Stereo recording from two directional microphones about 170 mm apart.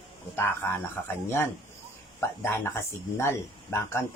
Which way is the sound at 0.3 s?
10° left (ahead or behind).